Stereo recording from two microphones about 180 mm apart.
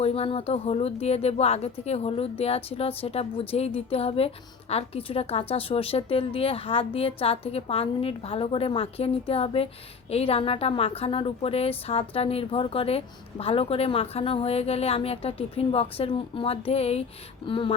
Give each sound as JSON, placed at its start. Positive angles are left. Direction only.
{"t": 0.0, "sound": "a woman's voice", "side_deg": 35}